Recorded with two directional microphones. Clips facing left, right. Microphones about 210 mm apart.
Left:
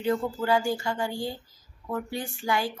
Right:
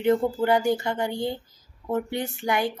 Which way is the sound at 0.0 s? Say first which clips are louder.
Right 5 dB; 25° right (ahead or behind).